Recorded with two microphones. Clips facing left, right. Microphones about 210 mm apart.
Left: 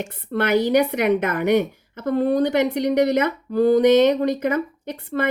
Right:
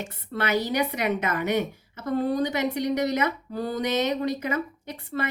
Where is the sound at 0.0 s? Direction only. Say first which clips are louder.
Left 6 dB; 55° left (ahead or behind).